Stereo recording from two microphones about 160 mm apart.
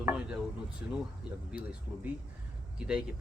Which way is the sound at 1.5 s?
5° right (ahead or behind).